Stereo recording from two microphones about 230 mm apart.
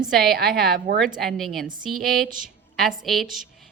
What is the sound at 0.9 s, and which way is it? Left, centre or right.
A woman's voice, centre.